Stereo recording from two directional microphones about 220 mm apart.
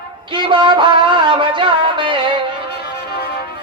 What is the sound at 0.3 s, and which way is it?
Music, 20° right (ahead or behind).